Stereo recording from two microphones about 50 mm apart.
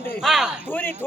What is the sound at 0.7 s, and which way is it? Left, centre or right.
Speech, left.